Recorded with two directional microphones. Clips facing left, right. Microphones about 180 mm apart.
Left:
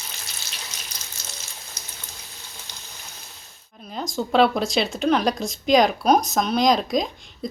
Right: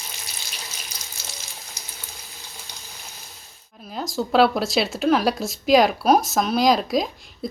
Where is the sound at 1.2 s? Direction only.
10° right (ahead or behind).